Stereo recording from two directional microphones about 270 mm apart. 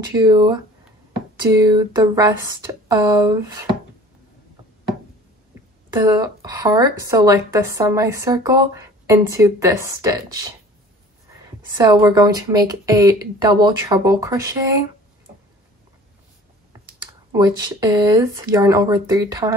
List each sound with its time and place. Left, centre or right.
0.1 s a woman's voice: centre
5.5 s a woman's voice: centre
11.7 s a woman's voice: centre
17.3 s a woman's voice: centre